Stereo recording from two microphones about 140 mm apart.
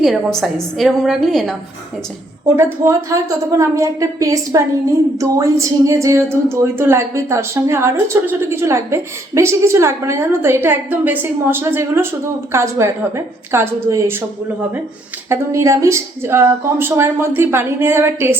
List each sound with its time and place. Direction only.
0.0 s a woman's voice: centre (ahead or behind)
2.6 s speech: 15° right (ahead or behind)
15.3 s a woman's voice: 20° right (ahead or behind)